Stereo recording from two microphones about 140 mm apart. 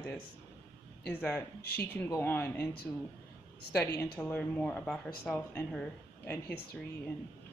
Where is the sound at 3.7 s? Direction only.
15° left (ahead or behind).